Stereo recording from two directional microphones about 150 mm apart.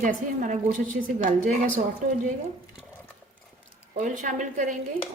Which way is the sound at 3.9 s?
55° right (ahead or behind).